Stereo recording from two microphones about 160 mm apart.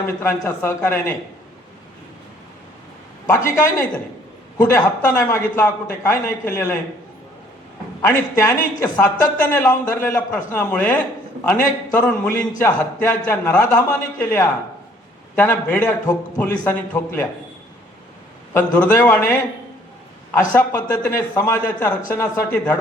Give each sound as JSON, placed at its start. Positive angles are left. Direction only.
{"t": 0.0, "sound": "a man's voice", "side_deg": 15}
{"t": 3.2, "sound": "a man's voice", "side_deg": 20}
{"t": 8.4, "sound": "a man's voice", "side_deg": 20}
{"t": 18.5, "sound": "a man's voice", "side_deg": 10}
{"t": 20.6, "sound": "a man's voice", "side_deg": 10}